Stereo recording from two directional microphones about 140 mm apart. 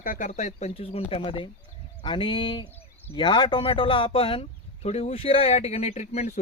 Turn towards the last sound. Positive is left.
turn(degrees=50)  # may be behind; listen again after turning